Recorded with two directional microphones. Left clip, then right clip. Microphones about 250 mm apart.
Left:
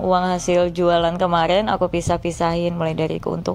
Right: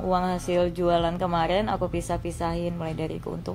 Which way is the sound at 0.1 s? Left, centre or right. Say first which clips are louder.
Left 6 dB; left.